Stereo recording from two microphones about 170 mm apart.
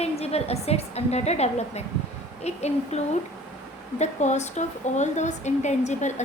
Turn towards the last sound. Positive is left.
turn(degrees=45)  # may be behind; listen again after turning